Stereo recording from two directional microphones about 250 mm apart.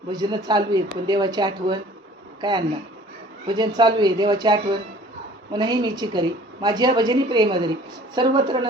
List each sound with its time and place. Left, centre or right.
0.1 s a woman's voice: centre